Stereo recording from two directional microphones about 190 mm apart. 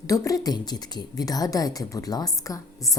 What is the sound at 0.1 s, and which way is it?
A woman's voice, 20° left (ahead or behind).